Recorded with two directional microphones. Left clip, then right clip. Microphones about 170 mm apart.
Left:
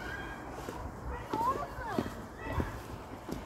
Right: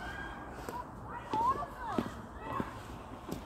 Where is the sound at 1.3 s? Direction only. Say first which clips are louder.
Right 1 dB; 55° right (ahead or behind).